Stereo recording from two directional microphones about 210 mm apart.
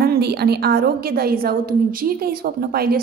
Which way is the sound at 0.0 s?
50° right (ahead or behind).